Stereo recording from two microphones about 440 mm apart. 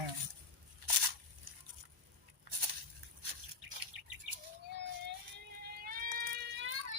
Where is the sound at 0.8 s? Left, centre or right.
Right.